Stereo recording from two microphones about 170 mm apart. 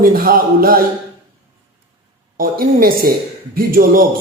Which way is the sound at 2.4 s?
60° right (ahead or behind).